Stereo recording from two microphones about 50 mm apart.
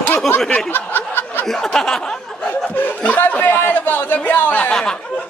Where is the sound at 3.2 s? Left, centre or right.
Left.